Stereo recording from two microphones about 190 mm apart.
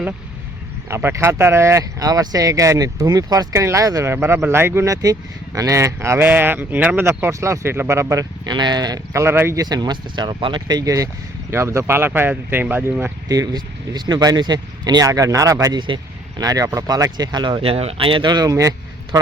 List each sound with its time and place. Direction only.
0.9 s speech: 15° right (ahead or behind)